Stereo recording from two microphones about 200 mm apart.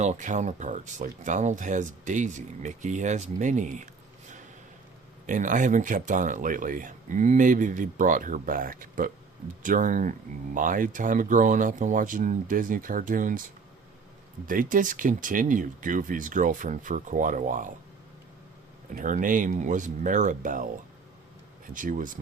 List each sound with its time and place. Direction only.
0.0 s speech: 35° right (ahead or behind)
5.2 s speech: 40° right (ahead or behind)
14.4 s speech: 45° right (ahead or behind)
18.9 s speech: 40° right (ahead or behind)
21.7 s speech: 40° right (ahead or behind)